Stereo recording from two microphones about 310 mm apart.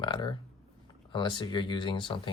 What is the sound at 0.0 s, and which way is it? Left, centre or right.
Speech, centre.